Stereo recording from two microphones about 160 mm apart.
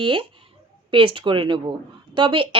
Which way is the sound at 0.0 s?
35° right (ahead or behind).